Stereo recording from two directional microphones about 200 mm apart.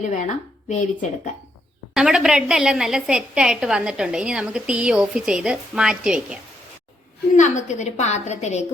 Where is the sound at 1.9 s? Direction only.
Centre (ahead or behind).